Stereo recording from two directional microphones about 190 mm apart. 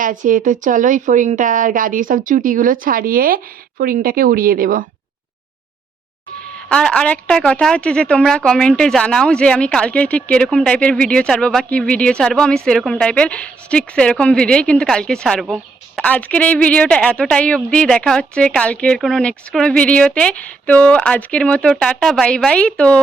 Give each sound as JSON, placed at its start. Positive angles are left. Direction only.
{"t": 0.0, "sound": "a woman's voice", "side_deg": -45}
{"t": 6.7, "sound": "a woman's voice", "side_deg": 5}